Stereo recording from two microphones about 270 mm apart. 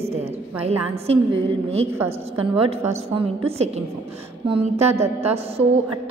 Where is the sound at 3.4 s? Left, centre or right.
Right.